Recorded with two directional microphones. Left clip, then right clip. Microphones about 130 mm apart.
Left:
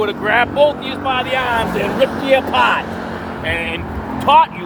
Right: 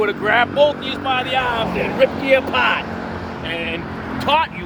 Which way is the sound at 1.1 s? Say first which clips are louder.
Left 1 dB; 25° right (ahead or behind).